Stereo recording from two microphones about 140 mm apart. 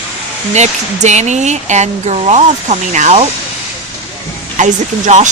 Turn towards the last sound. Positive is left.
turn(degrees=-60)  # may be behind; listen again after turning